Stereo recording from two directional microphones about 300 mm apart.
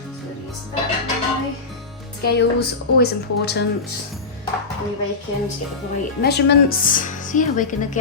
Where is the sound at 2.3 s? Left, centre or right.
Left.